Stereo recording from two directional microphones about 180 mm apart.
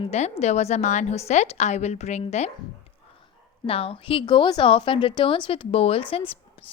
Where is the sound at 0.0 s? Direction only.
35° left (ahead or behind).